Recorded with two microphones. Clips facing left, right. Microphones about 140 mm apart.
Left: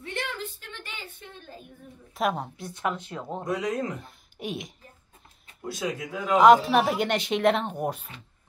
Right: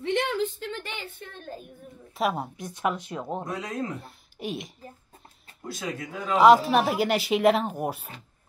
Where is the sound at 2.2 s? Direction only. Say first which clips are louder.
Even; 5° right (ahead or behind).